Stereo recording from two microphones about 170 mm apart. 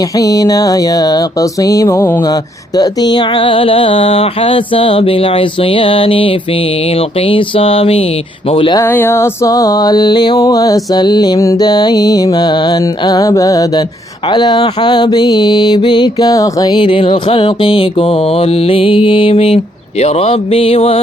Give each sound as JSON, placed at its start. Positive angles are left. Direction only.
{"t": 0.2, "sound": "mantra", "side_deg": 20}
{"t": 8.8, "sound": "mantra", "side_deg": 15}